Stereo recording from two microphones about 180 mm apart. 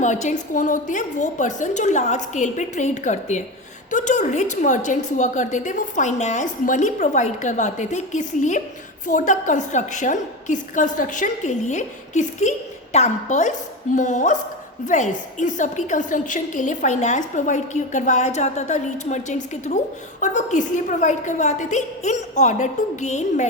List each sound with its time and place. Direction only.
0.0 s a woman's voice: 40° left (ahead or behind)